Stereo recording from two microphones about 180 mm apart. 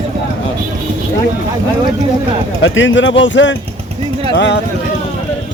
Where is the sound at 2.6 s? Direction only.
90° left.